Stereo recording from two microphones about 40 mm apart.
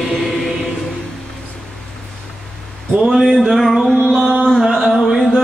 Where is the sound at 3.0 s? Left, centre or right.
Centre.